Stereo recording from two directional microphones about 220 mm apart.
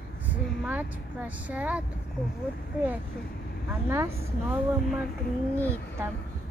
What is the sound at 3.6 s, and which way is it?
Speech, 10° right (ahead or behind).